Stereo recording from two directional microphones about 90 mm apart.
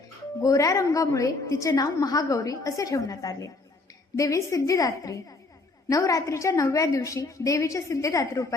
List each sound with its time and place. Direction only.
0.4 s a woman's voice: 40° left (ahead or behind)